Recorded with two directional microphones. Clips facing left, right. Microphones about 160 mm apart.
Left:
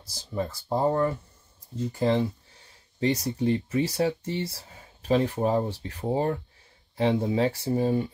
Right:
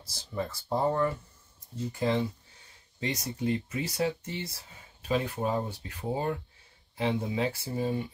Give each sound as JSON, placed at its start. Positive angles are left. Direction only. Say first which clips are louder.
{"t": 0.7, "sound": "speech", "louder": "left 3 dB", "side_deg": 30}